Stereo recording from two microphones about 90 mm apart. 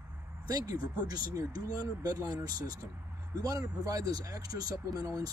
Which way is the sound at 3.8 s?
40° right (ahead or behind).